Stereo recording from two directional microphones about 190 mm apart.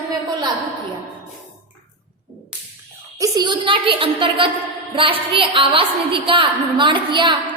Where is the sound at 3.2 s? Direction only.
20° right (ahead or behind).